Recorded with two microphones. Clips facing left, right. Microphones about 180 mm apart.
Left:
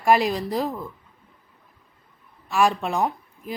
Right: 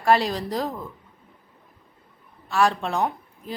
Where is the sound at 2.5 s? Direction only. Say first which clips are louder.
Left 1 dB; 10° left (ahead or behind).